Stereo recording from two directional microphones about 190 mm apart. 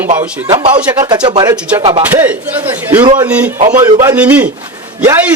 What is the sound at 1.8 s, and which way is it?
Speech, 35° right (ahead or behind).